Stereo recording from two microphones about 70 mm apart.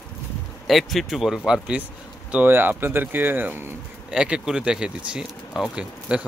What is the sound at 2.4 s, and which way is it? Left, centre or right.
Speech, right.